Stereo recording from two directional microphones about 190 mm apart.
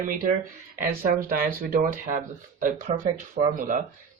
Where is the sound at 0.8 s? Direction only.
45° right (ahead or behind).